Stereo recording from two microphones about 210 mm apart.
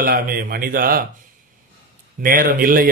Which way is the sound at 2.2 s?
40° right (ahead or behind).